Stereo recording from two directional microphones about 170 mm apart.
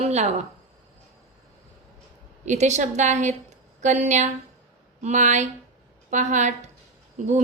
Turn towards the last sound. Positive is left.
turn(degrees=-45)  # may be behind; listen again after turning